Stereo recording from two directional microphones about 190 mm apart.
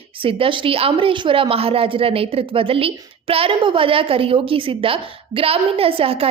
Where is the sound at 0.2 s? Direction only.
30° right (ahead or behind).